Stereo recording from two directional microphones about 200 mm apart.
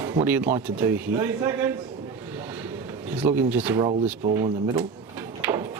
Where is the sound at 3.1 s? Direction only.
10° right (ahead or behind).